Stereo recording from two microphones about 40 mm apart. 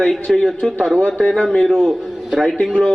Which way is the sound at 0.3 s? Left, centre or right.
Centre.